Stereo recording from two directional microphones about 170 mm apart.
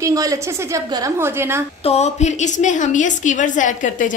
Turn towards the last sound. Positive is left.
turn(degrees=50)  # may be behind; listen again after turning